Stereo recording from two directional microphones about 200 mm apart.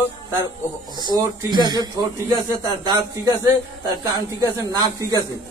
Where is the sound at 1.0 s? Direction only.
20° right (ahead or behind).